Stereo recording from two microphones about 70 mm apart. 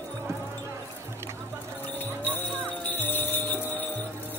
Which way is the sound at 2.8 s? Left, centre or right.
Left.